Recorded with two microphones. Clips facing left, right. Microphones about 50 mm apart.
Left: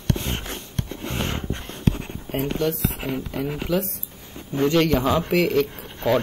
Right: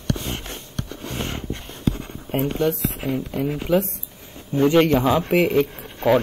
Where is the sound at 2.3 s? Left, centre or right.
Right.